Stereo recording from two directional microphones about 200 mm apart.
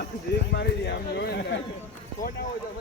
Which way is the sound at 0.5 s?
55° left (ahead or behind).